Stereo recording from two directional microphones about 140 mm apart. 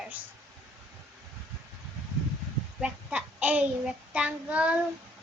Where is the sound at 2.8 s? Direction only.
10° right (ahead or behind).